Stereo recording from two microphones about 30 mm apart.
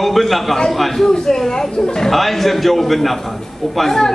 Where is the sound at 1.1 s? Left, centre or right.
Centre.